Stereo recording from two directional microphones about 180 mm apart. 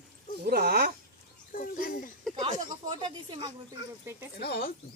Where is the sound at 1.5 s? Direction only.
50° left (ahead or behind).